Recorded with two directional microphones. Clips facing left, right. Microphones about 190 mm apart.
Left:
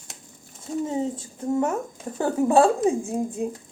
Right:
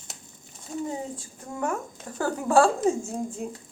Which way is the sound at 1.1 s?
20° left (ahead or behind).